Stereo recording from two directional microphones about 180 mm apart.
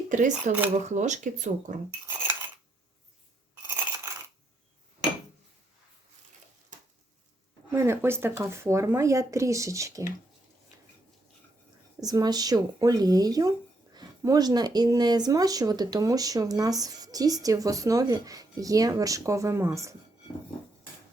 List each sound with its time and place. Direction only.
0.1 s speech: 45° right (ahead or behind)
7.7 s speech: 15° right (ahead or behind)
12.0 s speech: 20° right (ahead or behind)